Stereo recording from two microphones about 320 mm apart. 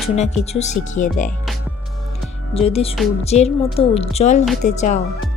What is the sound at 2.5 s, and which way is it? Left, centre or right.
Speech, centre.